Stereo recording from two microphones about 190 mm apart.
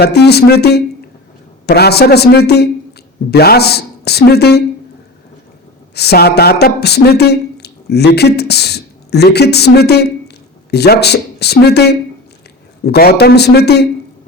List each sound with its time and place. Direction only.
0.0 s speech: 60° left (ahead or behind)
5.9 s speech: 60° left (ahead or behind)